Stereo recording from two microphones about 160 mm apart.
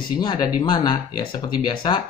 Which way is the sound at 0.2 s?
25° left (ahead or behind).